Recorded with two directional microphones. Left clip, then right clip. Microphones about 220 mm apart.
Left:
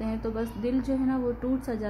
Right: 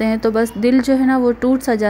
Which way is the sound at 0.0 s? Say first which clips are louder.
Right 15 dB; 35° right (ahead or behind).